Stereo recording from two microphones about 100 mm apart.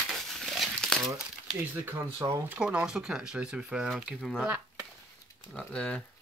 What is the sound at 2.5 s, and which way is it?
Speech, 10° right (ahead or behind).